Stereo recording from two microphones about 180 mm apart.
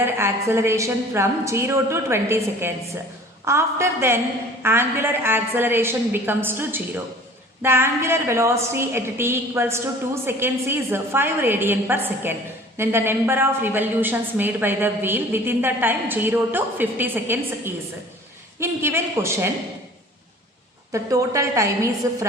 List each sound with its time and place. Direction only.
0.0 s a woman's voice: 15° right (ahead or behind)
20.9 s a woman's voice: 15° right (ahead or behind)